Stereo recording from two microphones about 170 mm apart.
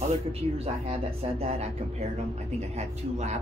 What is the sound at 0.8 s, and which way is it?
Speech, 35° right (ahead or behind).